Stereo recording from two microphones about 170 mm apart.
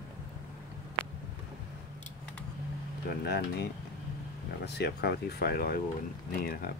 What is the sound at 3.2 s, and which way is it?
Speech, 70° left (ahead or behind).